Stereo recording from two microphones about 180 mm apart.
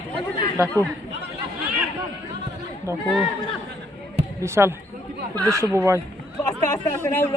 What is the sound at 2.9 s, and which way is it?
Speech, 15° right (ahead or behind).